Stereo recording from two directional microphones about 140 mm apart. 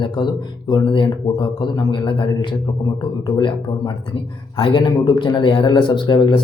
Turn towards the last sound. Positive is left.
turn(degrees=35)  # may be behind; listen again after turning